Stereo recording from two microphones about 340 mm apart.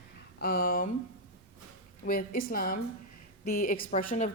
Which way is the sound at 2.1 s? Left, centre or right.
Left.